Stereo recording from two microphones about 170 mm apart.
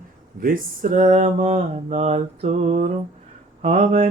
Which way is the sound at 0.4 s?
55° right (ahead or behind).